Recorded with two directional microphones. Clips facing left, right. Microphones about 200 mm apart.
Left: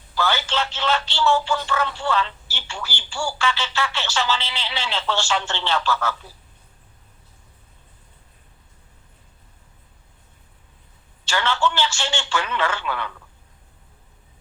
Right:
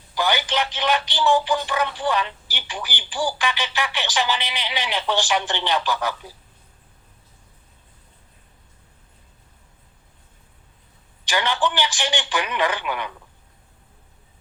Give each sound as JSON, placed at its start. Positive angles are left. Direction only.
{"t": 0.1, "sound": "speech", "side_deg": -15}
{"t": 11.3, "sound": "speech", "side_deg": -15}